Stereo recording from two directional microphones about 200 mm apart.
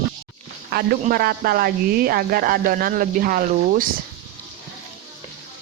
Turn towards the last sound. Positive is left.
turn(degrees=-45)  # may be behind; listen again after turning